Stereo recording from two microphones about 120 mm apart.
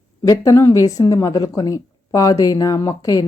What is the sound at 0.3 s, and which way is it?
A woman's voice, 25° left (ahead or behind).